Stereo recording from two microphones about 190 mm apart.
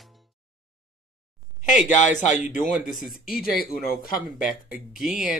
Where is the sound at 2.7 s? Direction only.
Centre (ahead or behind).